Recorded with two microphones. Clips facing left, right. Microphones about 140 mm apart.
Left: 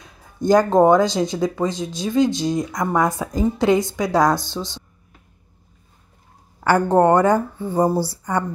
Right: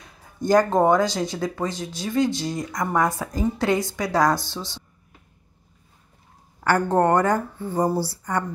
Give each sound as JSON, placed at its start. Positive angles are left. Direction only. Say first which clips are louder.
{"t": 0.4, "sound": "speech", "louder": "left 4 dB", "side_deg": 20}
{"t": 7.0, "sound": "speech", "louder": "left 5 dB", "side_deg": 20}